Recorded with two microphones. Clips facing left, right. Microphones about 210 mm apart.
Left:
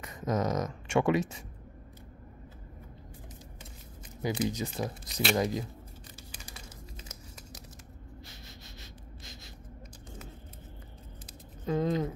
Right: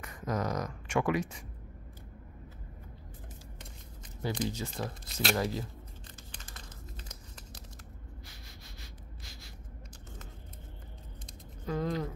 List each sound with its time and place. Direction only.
0.0 s speech: 20° left (ahead or behind)
4.2 s speech: 10° left (ahead or behind)
6.3 s a sound: 10° left (ahead or behind)
9.2 s gasp: 20° left (ahead or behind)
11.6 s speech: 20° left (ahead or behind)